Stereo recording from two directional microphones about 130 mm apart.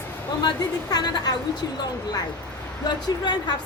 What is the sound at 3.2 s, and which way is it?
Speech, 35° left (ahead or behind).